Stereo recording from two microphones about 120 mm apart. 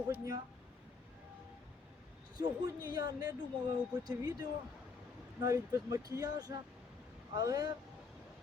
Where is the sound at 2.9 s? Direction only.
35° right (ahead or behind).